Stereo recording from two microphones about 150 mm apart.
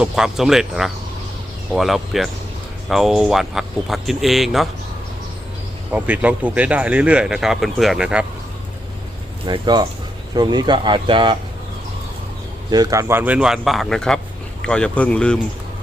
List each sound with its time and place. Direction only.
0.0 s speech: 5° right (ahead or behind)
5.9 s speech: 10° right (ahead or behind)
9.5 s speech: 30° right (ahead or behind)
12.7 s speech: 25° right (ahead or behind); by 15.4 s 5° left (ahead or behind)